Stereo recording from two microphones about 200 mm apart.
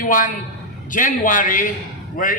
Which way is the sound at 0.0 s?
40° left (ahead or behind).